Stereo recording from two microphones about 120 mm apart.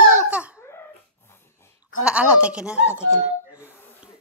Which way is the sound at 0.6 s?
20° left (ahead or behind).